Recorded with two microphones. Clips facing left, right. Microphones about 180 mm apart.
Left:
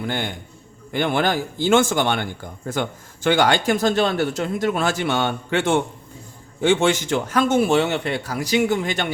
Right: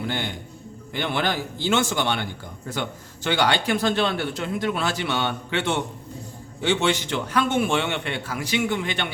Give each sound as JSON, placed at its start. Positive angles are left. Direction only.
{"t": 0.0, "sound": "a man's voice", "side_deg": 50}